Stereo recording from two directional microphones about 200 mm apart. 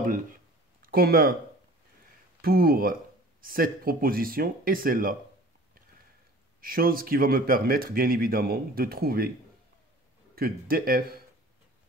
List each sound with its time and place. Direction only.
0.8 s speech: 50° right (ahead or behind)
2.4 s speech: 45° right (ahead or behind)
6.6 s speech: 45° right (ahead or behind)
10.3 s speech: 50° right (ahead or behind)